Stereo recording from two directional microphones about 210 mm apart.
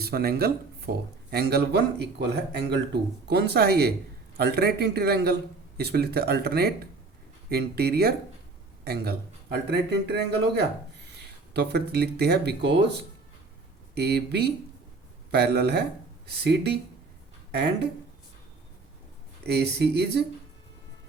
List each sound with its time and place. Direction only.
0.0 s speech: 50° right (ahead or behind)
19.4 s speech: 50° right (ahead or behind)